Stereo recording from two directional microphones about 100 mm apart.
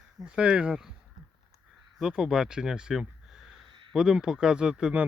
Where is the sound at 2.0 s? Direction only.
5° right (ahead or behind).